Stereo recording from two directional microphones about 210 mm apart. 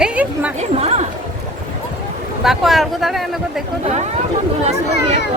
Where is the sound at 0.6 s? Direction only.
30° right (ahead or behind).